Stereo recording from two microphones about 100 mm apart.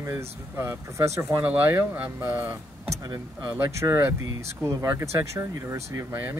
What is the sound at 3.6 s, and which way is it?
Speech, 25° right (ahead or behind).